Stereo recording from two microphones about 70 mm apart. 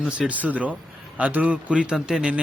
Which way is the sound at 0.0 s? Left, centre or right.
Centre.